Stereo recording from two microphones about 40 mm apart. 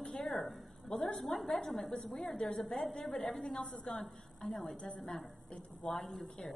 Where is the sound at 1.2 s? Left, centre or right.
Centre.